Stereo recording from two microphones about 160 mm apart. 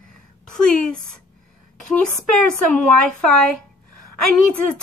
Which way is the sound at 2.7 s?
5° left (ahead or behind).